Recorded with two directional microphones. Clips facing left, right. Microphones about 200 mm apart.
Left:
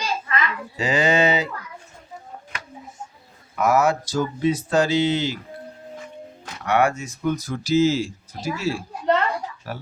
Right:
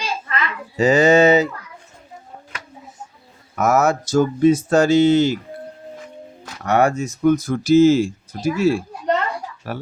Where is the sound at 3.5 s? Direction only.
45° right (ahead or behind).